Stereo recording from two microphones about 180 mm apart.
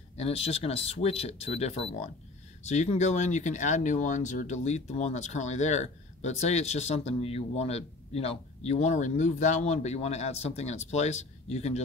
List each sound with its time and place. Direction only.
0.2 s speech: 35° left (ahead or behind)